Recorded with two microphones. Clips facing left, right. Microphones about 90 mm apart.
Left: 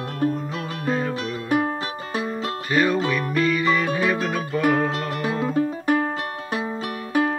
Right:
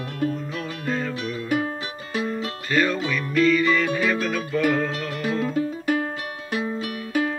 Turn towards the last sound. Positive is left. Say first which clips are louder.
# left 2 dB
turn(degrees=40)  # may be behind; listen again after turning